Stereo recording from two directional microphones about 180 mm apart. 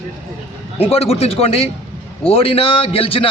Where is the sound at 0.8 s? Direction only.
35° left (ahead or behind).